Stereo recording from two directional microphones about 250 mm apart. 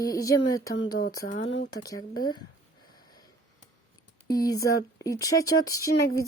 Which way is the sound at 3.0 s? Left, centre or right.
Centre.